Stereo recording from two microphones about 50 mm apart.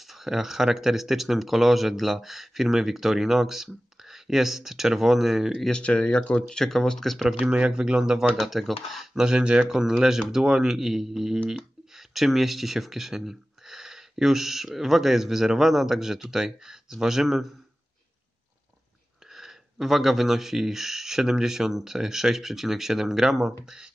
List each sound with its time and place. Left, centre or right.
0.0 s speech: centre
5.7 s speech: left
6.4 s speech: centre
7.2 s speech: centre
8.4 s speech: centre
9.1 s speech: centre
9.7 s speech: centre
19.3 s speech: centre